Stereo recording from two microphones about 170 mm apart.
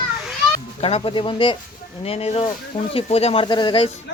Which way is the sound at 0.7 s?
35° left (ahead or behind).